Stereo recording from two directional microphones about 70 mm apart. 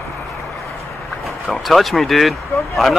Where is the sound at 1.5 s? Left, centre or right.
Centre.